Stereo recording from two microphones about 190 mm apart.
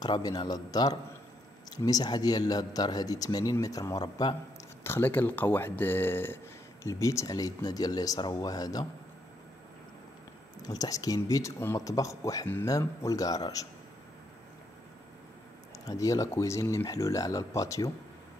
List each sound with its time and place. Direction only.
0.0 s speech: 20° left (ahead or behind)
4.8 s speech: 10° left (ahead or behind)
10.6 s speech: 20° left (ahead or behind)
15.8 s speech: 20° left (ahead or behind)